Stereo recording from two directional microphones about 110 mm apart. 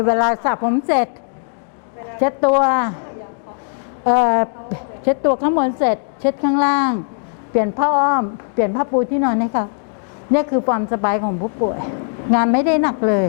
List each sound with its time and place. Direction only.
0.0 s a woman's voice: 20° left (ahead or behind)
2.1 s a woman's voice: 20° left (ahead or behind)
4.0 s a woman's voice: 20° left (ahead or behind)
10.7 s a woman's voice: 20° left (ahead or behind)